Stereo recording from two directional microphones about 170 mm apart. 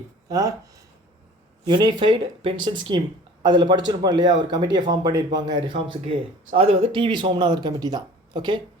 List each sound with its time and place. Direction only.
0.3 s speech: 20° right (ahead or behind)
1.6 s speech: 25° right (ahead or behind)